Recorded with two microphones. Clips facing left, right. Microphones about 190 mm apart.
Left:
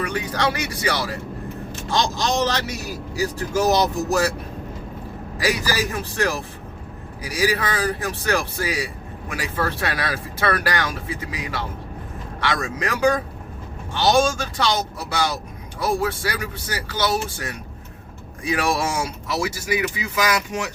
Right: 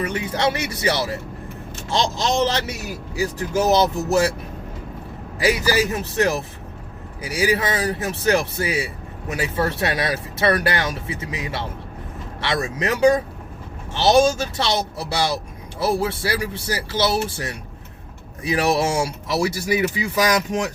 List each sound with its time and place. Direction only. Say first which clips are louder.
0.0 s speech: right 1 dB; 25° right (ahead or behind)
6.1 s speech: right 4 dB; 20° right (ahead or behind)